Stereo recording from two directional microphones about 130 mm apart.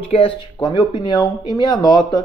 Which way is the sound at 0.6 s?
35° left (ahead or behind).